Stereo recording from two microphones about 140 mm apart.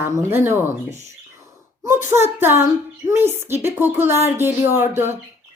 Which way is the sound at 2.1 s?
15° right (ahead or behind).